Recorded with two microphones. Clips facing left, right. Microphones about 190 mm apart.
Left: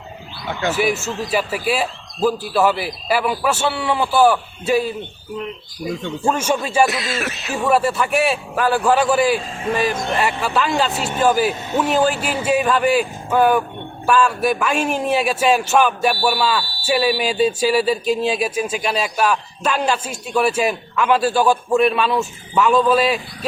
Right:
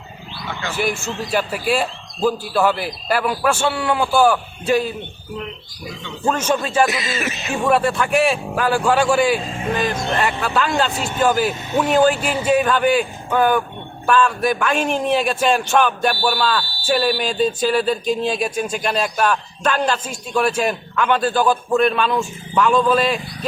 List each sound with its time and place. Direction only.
0.8 s speech: 5° left (ahead or behind)
6.2 s a man's voice: 10° left (ahead or behind)